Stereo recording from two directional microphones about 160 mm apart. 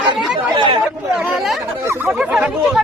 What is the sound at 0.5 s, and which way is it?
Chatter, 30° right (ahead or behind).